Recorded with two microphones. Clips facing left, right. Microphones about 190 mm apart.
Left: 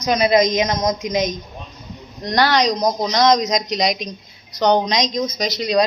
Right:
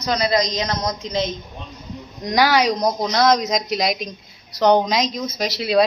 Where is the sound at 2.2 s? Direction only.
10° right (ahead or behind).